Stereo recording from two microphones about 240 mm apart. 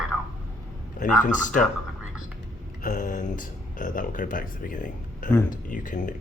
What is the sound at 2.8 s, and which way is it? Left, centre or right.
Speech, left.